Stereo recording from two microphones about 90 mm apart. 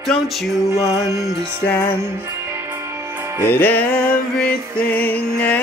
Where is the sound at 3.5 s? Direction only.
20° left (ahead or behind).